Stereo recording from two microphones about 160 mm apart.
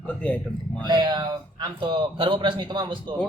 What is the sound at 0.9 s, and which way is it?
Speech, 25° right (ahead or behind).